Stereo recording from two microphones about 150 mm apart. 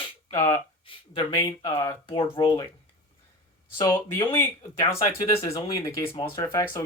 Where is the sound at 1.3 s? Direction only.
25° left (ahead or behind).